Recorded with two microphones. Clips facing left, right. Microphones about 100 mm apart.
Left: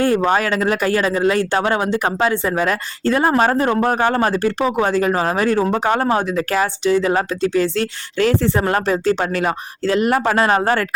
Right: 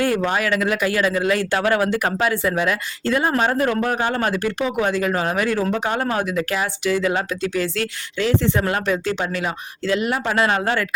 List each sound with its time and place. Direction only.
0.0 s speech: 35° left (ahead or behind)
6.1 s speech: 30° left (ahead or behind)
8.2 s speech: 50° left (ahead or behind)
8.5 s speech: 35° left (ahead or behind)